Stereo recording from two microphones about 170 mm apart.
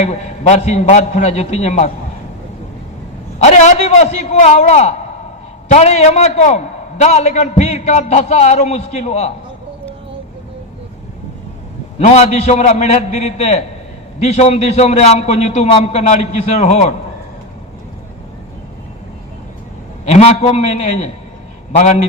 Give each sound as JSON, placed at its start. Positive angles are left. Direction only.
{"t": 0.0, "sound": "a man's voice", "side_deg": 40}
{"t": 3.3, "sound": "a man's voice", "side_deg": 40}
{"t": 11.9, "sound": "a man's voice", "side_deg": 40}
{"t": 20.1, "sound": "a man's voice", "side_deg": 40}